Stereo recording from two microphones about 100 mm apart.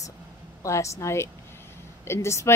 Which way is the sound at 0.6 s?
30° left (ahead or behind).